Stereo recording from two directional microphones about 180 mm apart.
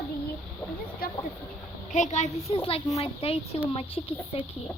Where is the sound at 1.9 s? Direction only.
40° left (ahead or behind).